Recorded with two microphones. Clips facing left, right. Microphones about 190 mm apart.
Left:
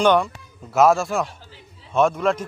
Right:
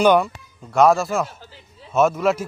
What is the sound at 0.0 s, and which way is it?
Speech, 10° right (ahead or behind).